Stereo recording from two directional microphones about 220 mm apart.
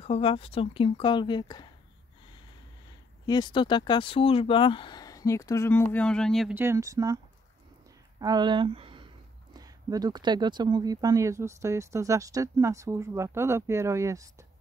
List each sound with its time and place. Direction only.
0.0 s speech: 25° left (ahead or behind)
3.3 s speech: 20° left (ahead or behind); by 6.6 s centre (ahead or behind)
6.6 s speech: 15° right (ahead or behind)
8.2 s speech: 20° right (ahead or behind)